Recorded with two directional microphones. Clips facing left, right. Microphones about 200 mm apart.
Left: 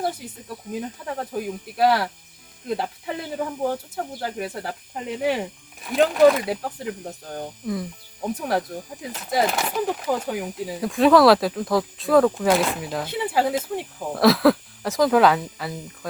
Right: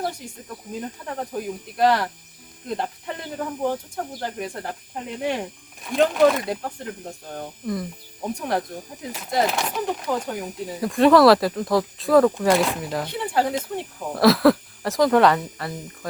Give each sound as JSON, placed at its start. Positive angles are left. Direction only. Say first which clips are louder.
{"t": 0.8, "sound": "speech", "louder": "even", "side_deg": 5}